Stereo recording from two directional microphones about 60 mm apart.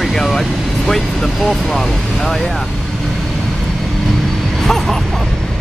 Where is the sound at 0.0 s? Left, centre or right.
Centre.